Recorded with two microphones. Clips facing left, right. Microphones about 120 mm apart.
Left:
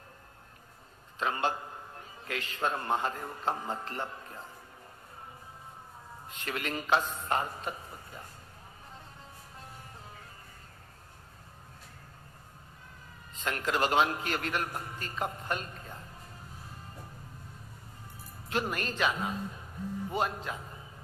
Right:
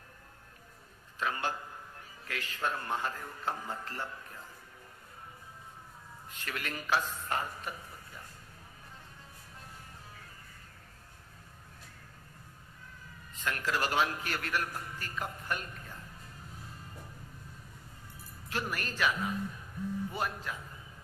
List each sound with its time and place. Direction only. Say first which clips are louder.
1.2 s a man's voice: left 3 dB; 25° left (ahead or behind)
6.2 s a man's voice: left 4 dB; 25° left (ahead or behind)
13.3 s a man's voice: left 2 dB; 25° left (ahead or behind)
18.4 s a man's voice: left 4 dB; 25° left (ahead or behind)